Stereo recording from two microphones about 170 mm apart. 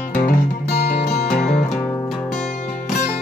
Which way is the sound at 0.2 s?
70° left (ahead or behind).